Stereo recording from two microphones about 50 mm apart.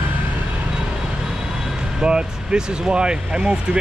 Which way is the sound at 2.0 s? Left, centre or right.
Centre.